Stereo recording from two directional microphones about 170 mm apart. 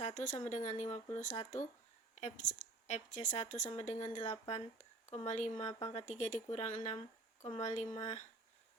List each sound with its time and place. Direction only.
0.0 s a woman's voice: 45° left (ahead or behind)